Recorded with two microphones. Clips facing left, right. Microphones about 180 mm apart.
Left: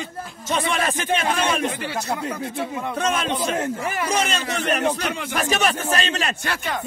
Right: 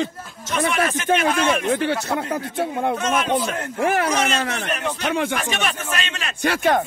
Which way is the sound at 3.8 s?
70° right (ahead or behind).